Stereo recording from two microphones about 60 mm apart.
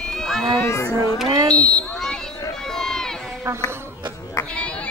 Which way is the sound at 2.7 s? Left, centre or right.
Centre.